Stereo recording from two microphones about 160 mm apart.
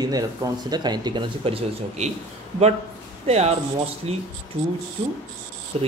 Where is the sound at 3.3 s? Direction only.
40° right (ahead or behind).